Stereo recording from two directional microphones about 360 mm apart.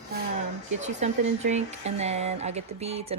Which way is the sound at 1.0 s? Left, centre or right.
Centre.